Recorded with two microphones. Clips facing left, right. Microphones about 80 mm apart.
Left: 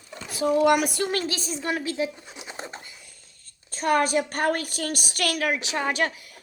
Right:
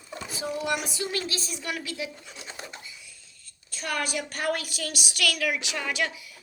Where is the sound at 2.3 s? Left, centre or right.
Centre.